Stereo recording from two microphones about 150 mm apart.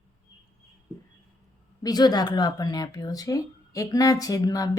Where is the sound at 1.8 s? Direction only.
25° left (ahead or behind).